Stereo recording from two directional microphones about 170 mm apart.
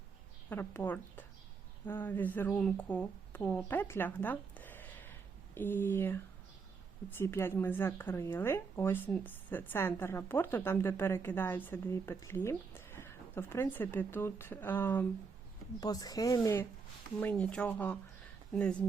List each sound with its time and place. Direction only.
0.5 s speech: 10° left (ahead or behind)
17.2 s speech: 10° left (ahead or behind)